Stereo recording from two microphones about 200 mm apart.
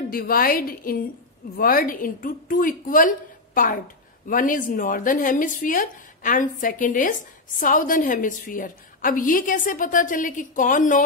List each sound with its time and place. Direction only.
0.1 s a woman's voice: 50° left (ahead or behind)